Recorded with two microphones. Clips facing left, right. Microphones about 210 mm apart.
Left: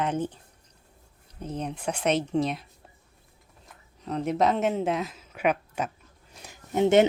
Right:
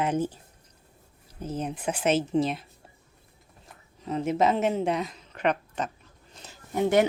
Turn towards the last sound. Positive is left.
turn(degrees=20)  # may be behind; listen again after turning